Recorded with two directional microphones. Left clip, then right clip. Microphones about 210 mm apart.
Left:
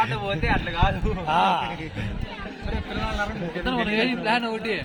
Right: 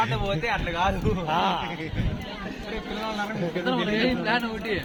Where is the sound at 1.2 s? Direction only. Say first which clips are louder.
Left 5 dB; 20° left (ahead or behind).